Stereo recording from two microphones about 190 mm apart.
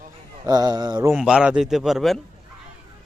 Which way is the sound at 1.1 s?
5° right (ahead or behind).